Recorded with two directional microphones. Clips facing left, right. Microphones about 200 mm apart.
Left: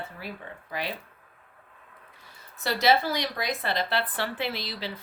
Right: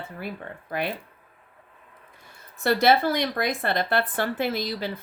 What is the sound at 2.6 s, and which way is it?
Speech, 55° right (ahead or behind).